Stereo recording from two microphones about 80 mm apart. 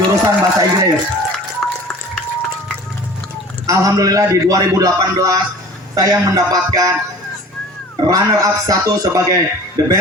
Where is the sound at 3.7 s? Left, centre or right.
Right.